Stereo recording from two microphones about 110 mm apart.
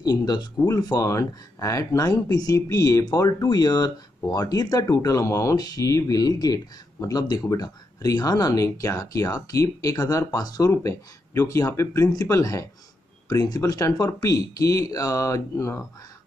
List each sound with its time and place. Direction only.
0.0 s speech: 35° left (ahead or behind)